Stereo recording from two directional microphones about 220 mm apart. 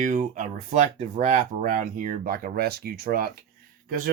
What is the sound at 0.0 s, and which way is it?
Speech, 35° right (ahead or behind).